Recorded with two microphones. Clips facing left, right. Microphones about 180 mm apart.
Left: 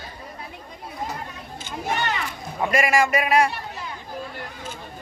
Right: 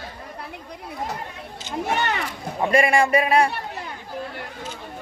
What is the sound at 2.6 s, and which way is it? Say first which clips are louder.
Speech: right 2 dB; 30° right (ahead or behind).